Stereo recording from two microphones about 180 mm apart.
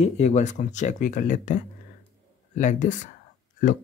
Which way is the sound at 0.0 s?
40° left (ahead or behind).